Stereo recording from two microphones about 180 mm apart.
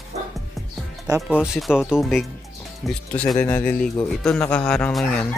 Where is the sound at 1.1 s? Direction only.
5° right (ahead or behind).